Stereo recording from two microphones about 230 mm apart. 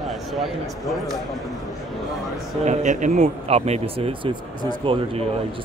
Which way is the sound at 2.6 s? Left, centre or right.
Right.